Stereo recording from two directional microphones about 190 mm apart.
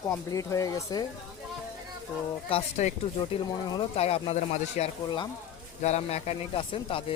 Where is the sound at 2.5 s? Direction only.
35° left (ahead or behind).